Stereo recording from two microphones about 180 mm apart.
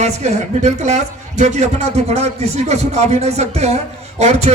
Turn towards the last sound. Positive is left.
turn(degrees=-35)  # may be behind; listen again after turning